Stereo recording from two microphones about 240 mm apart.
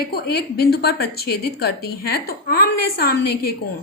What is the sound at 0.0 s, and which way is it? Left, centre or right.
A woman's voice, left.